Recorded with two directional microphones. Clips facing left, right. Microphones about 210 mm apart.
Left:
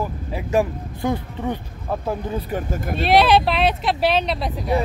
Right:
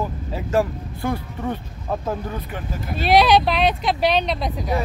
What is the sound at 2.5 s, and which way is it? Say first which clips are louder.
Speech: left 5 dB; 45° left (ahead or behind).